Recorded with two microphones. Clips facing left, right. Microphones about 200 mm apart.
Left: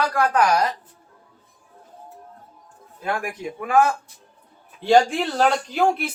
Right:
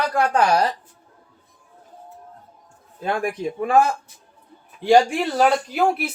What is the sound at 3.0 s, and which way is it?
Speech, 30° right (ahead or behind).